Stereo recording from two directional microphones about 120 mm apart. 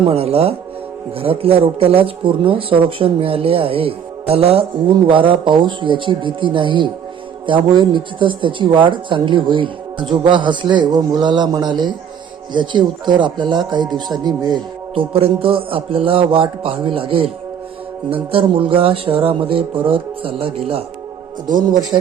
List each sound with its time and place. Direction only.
0.0 s speech: 55° right (ahead or behind); by 14.6 s 35° right (ahead or behind)
14.9 s speech: 50° right (ahead or behind)